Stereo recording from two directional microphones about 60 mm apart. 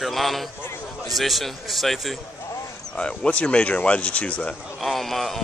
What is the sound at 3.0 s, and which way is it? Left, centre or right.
Speech, centre.